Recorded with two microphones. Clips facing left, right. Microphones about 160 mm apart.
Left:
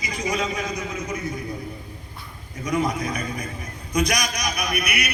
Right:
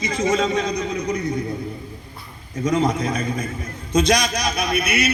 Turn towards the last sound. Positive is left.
turn(degrees=-25)  # may be behind; listen again after turning